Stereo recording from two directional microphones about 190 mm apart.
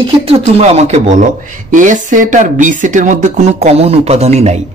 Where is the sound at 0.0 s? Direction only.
30° right (ahead or behind).